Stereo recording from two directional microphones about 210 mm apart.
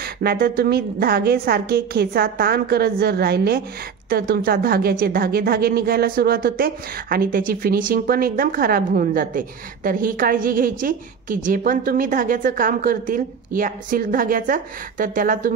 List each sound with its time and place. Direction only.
0.0 s a woman's voice: 45° right (ahead or behind)